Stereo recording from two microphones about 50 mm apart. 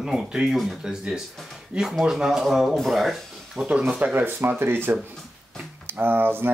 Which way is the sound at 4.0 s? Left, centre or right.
Right.